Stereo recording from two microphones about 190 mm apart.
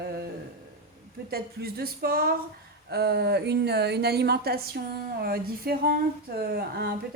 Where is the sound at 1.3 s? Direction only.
55° right (ahead or behind).